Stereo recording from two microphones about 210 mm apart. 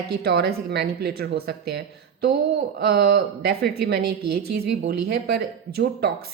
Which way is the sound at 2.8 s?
50° right (ahead or behind).